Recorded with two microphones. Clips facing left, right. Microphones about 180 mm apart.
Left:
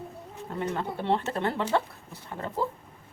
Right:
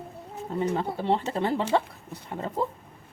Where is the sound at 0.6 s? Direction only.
15° right (ahead or behind).